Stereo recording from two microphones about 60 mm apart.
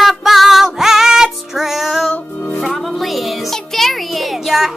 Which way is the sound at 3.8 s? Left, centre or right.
Centre.